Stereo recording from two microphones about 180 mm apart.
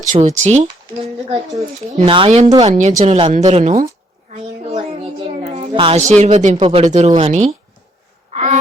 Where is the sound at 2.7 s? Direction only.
40° right (ahead or behind).